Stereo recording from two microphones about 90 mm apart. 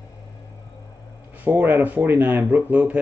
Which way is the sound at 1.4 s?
20° right (ahead or behind).